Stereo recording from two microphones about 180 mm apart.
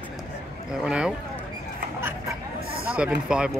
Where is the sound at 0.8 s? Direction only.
5° right (ahead or behind).